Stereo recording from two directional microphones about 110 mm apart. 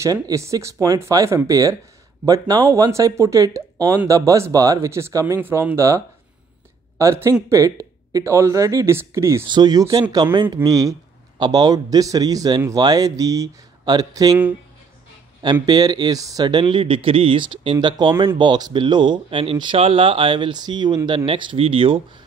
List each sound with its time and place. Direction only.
0.0 s a man's voice: 30° right (ahead or behind)
9.5 s a man's voice: 40° right (ahead or behind)
15.6 s speech: 35° right (ahead or behind)
21.3 s speech: 55° right (ahead or behind)